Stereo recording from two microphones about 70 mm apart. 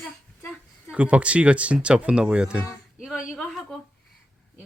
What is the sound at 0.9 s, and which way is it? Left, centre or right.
Speech, centre.